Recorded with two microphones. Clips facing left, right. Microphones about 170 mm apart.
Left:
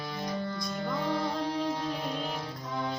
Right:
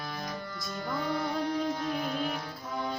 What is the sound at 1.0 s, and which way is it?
Music, 25° left (ahead or behind).